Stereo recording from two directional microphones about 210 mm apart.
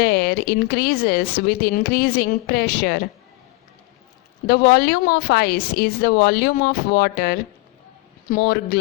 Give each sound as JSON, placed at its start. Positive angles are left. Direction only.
{"t": 0.0, "sound": "speech", "side_deg": 50}
{"t": 4.4, "sound": "speech", "side_deg": 50}